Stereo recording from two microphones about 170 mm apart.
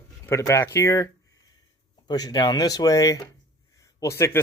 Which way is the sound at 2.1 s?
25° left (ahead or behind).